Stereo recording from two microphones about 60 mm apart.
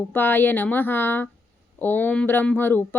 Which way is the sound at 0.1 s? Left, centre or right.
Left.